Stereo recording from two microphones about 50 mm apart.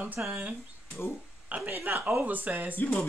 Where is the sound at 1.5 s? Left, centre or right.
Right.